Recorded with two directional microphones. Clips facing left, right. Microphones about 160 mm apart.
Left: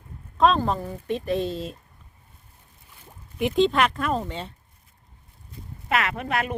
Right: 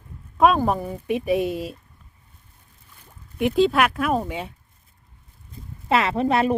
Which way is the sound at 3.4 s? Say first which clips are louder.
Right 2 dB; 5° right (ahead or behind).